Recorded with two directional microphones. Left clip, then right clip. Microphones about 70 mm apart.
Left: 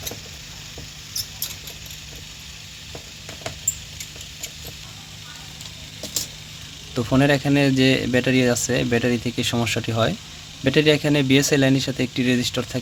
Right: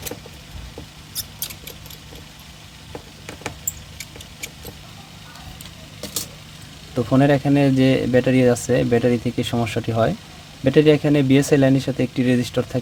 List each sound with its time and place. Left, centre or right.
6.9 s speech: right
7.2 s speech: right
8.9 s speech: right